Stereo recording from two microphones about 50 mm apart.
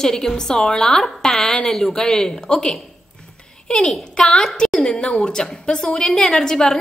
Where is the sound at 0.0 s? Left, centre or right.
Centre.